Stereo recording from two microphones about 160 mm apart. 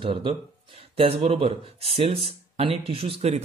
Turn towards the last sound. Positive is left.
turn(degrees=-40)  # may be behind; listen again after turning